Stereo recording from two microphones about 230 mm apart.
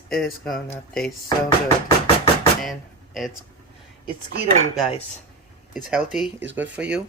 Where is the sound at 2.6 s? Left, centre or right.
Centre.